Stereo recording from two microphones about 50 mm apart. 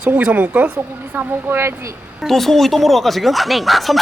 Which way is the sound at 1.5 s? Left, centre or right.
Right.